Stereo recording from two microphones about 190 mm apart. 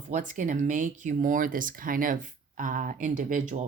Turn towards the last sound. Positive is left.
turn(degrees=-45)  # may be behind; listen again after turning